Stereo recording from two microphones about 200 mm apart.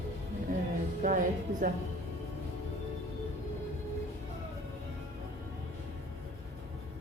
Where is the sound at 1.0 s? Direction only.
40° right (ahead or behind).